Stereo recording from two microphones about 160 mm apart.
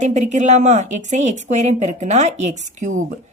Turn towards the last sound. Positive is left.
turn(degrees=-50)  # may be behind; listen again after turning